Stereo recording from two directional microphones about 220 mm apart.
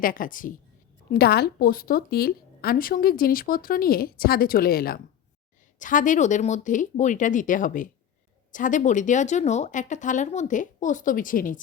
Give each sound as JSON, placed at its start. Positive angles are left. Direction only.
{"t": 0.0, "sound": "a woman's voice", "side_deg": 40}